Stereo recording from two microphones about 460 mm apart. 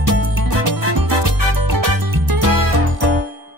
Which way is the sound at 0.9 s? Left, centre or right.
Right.